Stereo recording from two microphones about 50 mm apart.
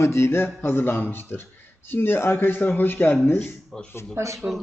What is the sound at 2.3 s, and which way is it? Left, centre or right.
Speech, left.